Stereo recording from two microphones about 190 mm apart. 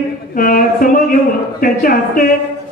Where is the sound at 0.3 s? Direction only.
45° left (ahead or behind).